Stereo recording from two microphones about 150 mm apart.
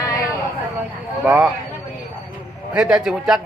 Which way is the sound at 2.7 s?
5° right (ahead or behind).